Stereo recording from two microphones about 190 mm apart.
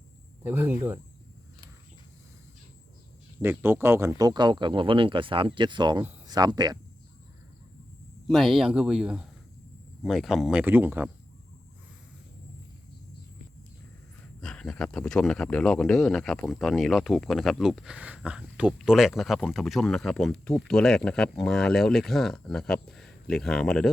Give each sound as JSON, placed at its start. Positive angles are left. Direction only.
{"t": 0.4, "sound": "speech", "side_deg": -10}
{"t": 3.4, "sound": "speech", "side_deg": -10}
{"t": 8.3, "sound": "speech", "side_deg": 0}
{"t": 14.4, "sound": "speech", "side_deg": 5}